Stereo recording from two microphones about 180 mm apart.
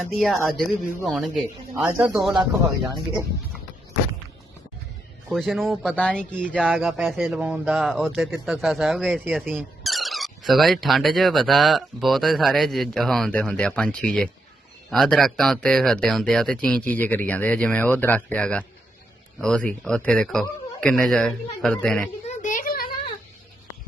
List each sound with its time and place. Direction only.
0.0 s a man's voice: centre (ahead or behind)
5.3 s a man's voice: centre (ahead or behind)
6.6 s a man's voice: 5° right (ahead or behind)
22.3 s a sound: 45° left (ahead or behind)